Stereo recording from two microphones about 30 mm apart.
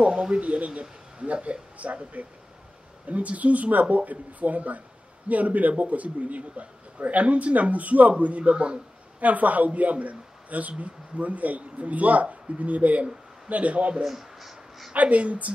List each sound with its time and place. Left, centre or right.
0.3 s a man's voice: right
9.2 s a man's voice: right
14.0 s a sound: centre
15.0 s speech: right